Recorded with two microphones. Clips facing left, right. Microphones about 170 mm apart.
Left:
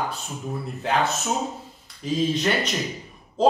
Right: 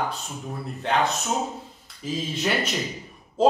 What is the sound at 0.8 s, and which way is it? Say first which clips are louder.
Speech: even; 5° left (ahead or behind).